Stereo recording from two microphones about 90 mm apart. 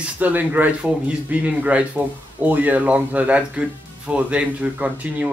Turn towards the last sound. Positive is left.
turn(degrees=-15)  # may be behind; listen again after turning